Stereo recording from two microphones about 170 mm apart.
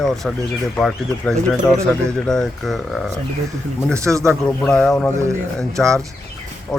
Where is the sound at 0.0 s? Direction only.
5° left (ahead or behind).